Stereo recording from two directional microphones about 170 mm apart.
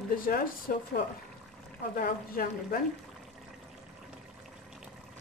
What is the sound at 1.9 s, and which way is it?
Speech, 60° left (ahead or behind).